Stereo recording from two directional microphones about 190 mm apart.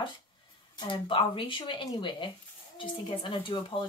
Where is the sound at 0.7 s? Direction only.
25° left (ahead or behind).